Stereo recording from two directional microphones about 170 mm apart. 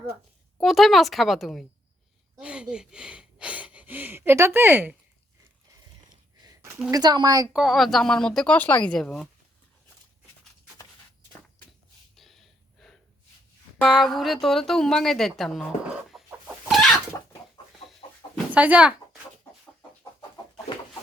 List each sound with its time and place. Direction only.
0.6 s a woman's voice: centre (ahead or behind)
2.4 s a sound: 5° right (ahead or behind)
6.9 s speech: 25° right (ahead or behind)
7.5 s a woman's voice: centre (ahead or behind)
12.1 s gasp: centre (ahead or behind)
13.7 s a woman's voice: centre (ahead or behind)
16.0 s chicken: centre (ahead or behind)
18.0 s chicken: 35° left (ahead or behind)
18.5 s speech: 10° right (ahead or behind)